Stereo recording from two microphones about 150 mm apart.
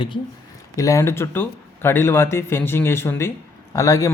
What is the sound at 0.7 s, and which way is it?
A man's voice, 20° left (ahead or behind).